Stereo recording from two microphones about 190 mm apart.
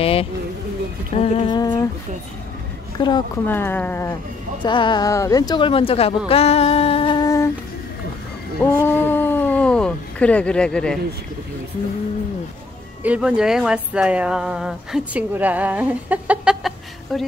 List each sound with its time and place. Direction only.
0.0 s bird: 30° left (ahead or behind)
1.1 s speech: 30° left (ahead or behind)
3.0 s speech: 20° left (ahead or behind)
3.4 s speech: 10° left (ahead or behind)
4.6 s speech: 25° left (ahead or behind)
8.8 s a sound: 10° left (ahead or behind)
13.0 s speech: 5° right (ahead or behind)